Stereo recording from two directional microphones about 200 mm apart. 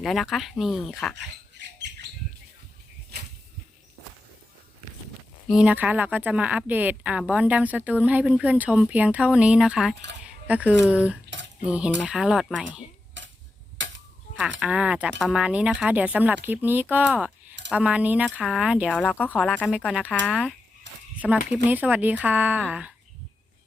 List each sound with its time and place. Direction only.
0.0 s speech: centre (ahead or behind)
1.1 s rodents: 60° right (ahead or behind)
5.5 s speech: 5° right (ahead or behind)
9.9 s speech: 60° right (ahead or behind)
10.2 s speech: 5° right (ahead or behind)
13.2 s a sound: 65° right (ahead or behind)
14.6 s speech: 5° right (ahead or behind)
19.0 s speech: 10° left (ahead or behind)
20.9 s a sound: 65° right (ahead or behind)
21.2 s speech: 5° right (ahead or behind)